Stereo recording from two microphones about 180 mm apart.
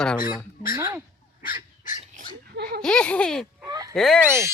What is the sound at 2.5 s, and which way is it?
Speech, 60° right (ahead or behind).